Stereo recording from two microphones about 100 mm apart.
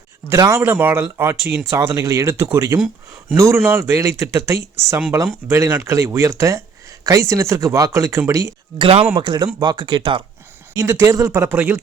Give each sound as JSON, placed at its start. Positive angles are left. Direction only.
{"t": 0.3, "sound": "speech", "side_deg": -30}
{"t": 8.8, "sound": "speech", "side_deg": -70}
{"t": 9.1, "sound": "speech", "side_deg": -45}
{"t": 10.8, "sound": "speech", "side_deg": -35}
{"t": 11.3, "sound": "speech", "side_deg": -20}